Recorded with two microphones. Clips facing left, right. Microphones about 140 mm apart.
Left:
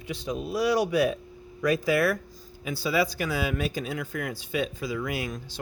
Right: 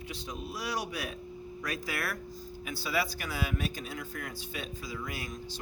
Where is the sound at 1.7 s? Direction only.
90° left.